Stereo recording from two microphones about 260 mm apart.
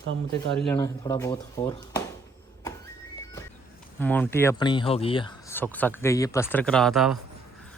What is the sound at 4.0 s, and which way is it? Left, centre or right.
Speech, centre.